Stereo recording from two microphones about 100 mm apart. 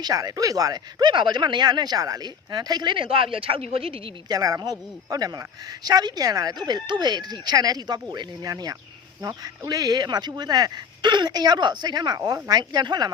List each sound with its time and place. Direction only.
0.0 s speech: 40° right (ahead or behind); by 4.1 s 65° right (ahead or behind)
4.3 s speech: 40° right (ahead or behind)